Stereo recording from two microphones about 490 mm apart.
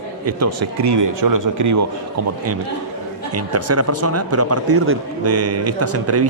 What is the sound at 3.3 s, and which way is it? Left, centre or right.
Speech, right.